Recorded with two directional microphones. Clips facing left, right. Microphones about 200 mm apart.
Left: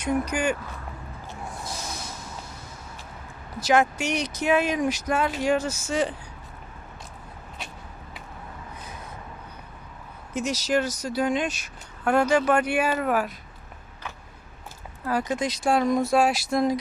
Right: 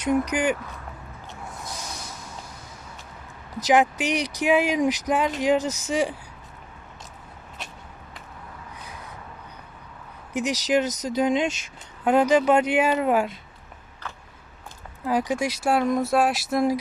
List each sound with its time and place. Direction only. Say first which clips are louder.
0.3 s speech: right 2 dB; 15° right (ahead or behind)
3.6 s speech: right 2 dB; 15° right (ahead or behind)
10.3 s speech: right 2 dB; 15° right (ahead or behind)
15.0 s speech: right 2 dB; 15° right (ahead or behind)